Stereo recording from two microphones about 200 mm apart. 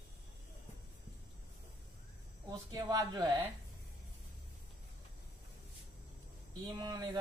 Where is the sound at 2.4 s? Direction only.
20° right (ahead or behind).